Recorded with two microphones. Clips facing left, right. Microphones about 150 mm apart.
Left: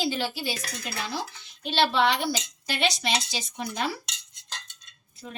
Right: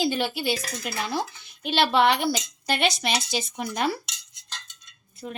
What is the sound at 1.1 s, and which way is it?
Speech, 50° right (ahead or behind).